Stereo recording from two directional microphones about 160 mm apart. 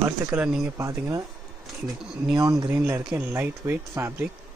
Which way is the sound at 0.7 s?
20° right (ahead or behind).